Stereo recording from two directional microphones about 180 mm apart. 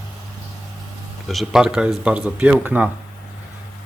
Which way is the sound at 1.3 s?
Centre (ahead or behind).